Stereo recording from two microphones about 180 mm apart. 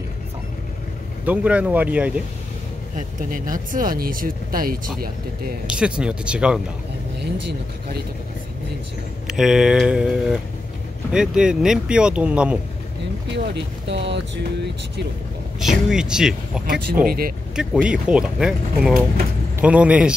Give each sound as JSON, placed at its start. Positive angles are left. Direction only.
{"t": 1.2, "sound": "speech", "side_deg": -10}
{"t": 3.0, "sound": "speech", "side_deg": -50}
{"t": 5.7, "sound": "speech", "side_deg": -5}
{"t": 9.3, "sound": "speech", "side_deg": -5}
{"t": 13.6, "sound": "speech", "side_deg": -75}
{"t": 15.6, "sound": "speech", "side_deg": -5}
{"t": 16.6, "sound": "speech", "side_deg": -55}
{"t": 17.6, "sound": "speech", "side_deg": -5}